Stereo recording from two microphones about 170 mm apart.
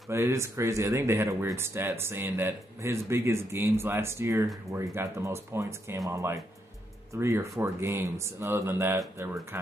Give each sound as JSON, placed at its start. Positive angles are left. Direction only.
{"t": 0.1, "sound": "speech", "side_deg": -15}